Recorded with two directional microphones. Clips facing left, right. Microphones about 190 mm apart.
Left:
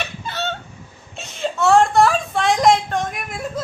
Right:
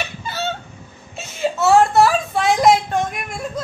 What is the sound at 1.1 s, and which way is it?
Whimper, 5° right (ahead or behind).